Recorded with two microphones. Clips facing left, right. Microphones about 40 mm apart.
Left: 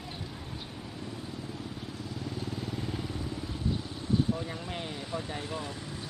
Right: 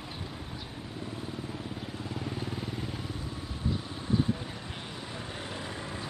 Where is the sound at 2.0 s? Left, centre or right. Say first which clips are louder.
Right 1 dB; right; by 2.9 s centre.